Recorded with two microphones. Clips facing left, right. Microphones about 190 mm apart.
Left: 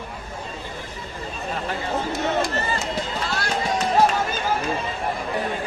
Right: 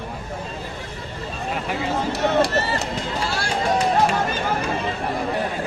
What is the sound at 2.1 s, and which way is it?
Run, 70° right (ahead or behind).